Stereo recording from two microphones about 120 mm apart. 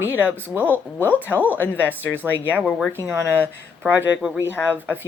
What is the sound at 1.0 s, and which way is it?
Speech, 15° left (ahead or behind).